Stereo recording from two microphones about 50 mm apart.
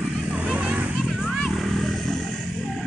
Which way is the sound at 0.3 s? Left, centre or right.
Right.